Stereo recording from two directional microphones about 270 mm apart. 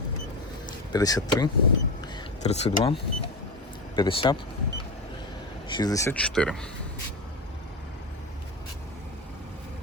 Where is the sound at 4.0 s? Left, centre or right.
Centre.